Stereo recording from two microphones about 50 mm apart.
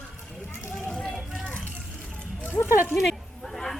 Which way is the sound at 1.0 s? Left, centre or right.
Centre.